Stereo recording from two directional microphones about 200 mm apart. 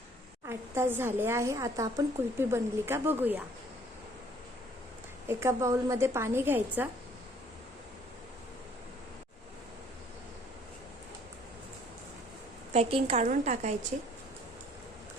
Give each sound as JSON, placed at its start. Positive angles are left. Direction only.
{"t": 0.4, "sound": "a woman's voice", "side_deg": -15}
{"t": 5.3, "sound": "a woman's voice", "side_deg": -15}
{"t": 12.7, "sound": "a woman's voice", "side_deg": -30}